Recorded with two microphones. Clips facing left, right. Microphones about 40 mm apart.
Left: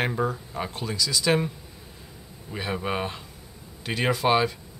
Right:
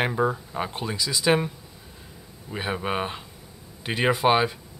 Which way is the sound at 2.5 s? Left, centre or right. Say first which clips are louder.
Right 1 dB; centre.